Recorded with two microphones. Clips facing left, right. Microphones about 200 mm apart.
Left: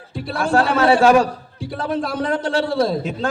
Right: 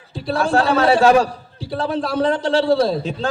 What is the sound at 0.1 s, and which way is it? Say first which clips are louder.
A man's voice: right 1 dB; 30° right (ahead or behind).